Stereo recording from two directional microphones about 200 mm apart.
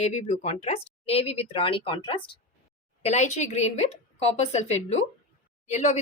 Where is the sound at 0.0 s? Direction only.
35° left (ahead or behind).